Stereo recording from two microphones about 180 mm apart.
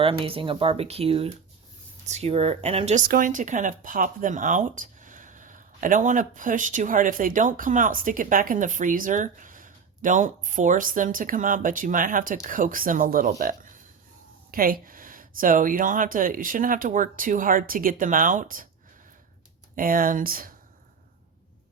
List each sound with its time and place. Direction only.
0.0 s speech: 30° right (ahead or behind)
3.1 s speech: 50° right (ahead or behind)
19.7 s speech: 50° right (ahead or behind)